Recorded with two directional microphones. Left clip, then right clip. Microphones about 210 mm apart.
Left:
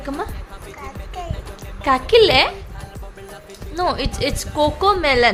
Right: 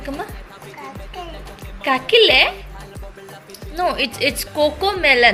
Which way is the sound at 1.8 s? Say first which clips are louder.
Even; 20° left (ahead or behind).